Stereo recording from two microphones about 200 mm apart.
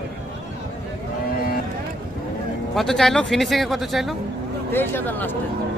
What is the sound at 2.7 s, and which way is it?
Speech, centre (ahead or behind).